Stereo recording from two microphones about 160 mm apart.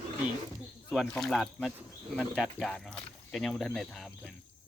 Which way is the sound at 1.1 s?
Centre (ahead or behind).